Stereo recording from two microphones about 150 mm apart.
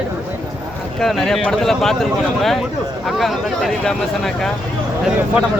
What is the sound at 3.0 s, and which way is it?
Speech, centre (ahead or behind).